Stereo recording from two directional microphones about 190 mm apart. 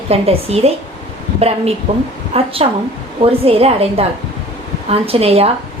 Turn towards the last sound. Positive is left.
turn(degrees=-30)  # may be behind; listen again after turning